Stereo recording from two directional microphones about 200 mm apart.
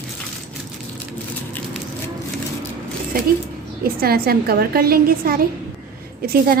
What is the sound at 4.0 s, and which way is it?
A woman's voice, 50° right (ahead or behind).